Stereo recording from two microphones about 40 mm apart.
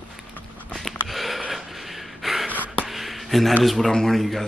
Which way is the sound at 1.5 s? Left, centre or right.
Centre.